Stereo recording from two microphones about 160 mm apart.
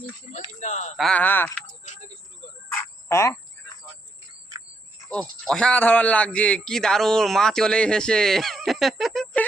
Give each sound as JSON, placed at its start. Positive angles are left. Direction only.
{"t": 0.3, "sound": "speech", "side_deg": 45}
{"t": 0.9, "sound": "speech", "side_deg": 5}
{"t": 1.8, "sound": "speech", "side_deg": 50}
{"t": 2.6, "sound": "cricket", "side_deg": 15}
{"t": 5.0, "sound": "a man's voice", "side_deg": 5}